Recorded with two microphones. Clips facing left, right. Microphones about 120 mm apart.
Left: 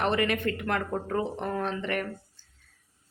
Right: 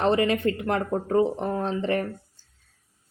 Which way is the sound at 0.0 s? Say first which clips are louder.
Right 5 dB; 25° right (ahead or behind).